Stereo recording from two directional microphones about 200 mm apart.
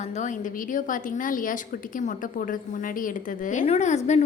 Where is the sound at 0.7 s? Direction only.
40° left (ahead or behind).